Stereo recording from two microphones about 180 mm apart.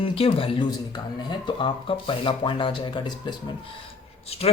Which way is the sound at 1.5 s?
30° left (ahead or behind).